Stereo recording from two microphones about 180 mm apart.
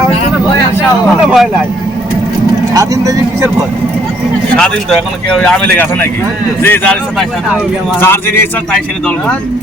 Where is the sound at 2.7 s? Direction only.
20° right (ahead or behind).